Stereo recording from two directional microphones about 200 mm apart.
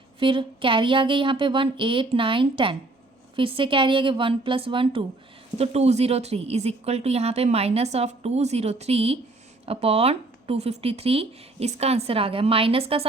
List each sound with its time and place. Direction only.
0.2 s speech: 25° right (ahead or behind)